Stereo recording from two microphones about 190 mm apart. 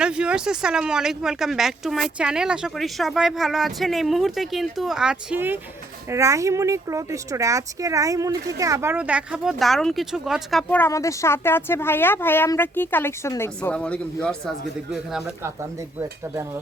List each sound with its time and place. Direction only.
0.0 s speech: 5° right (ahead or behind)
16.0 s speech: 15° right (ahead or behind)